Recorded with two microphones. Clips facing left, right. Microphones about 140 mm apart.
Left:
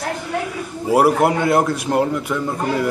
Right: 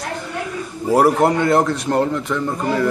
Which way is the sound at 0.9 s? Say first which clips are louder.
Even; 5° left (ahead or behind).